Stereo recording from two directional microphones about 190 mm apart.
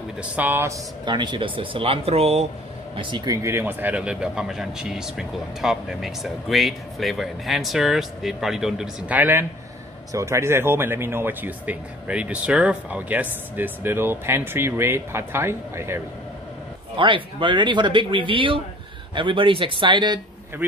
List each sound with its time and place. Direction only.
0.2 s speech: 10° right (ahead or behind)
1.0 s speech: 25° right (ahead or behind)
16.9 s speech: 25° right (ahead or behind)